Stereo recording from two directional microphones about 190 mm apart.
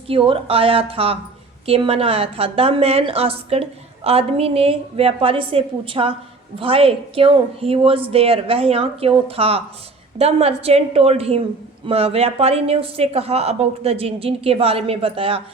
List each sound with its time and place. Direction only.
0.1 s a woman's voice: 30° right (ahead or behind)